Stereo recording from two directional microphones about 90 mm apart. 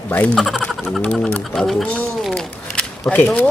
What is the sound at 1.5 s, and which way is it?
Speech, 5° left (ahead or behind).